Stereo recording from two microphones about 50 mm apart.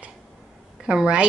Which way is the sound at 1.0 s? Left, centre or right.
Centre.